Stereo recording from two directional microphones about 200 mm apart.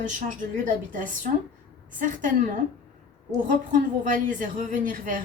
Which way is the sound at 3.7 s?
40° right (ahead or behind).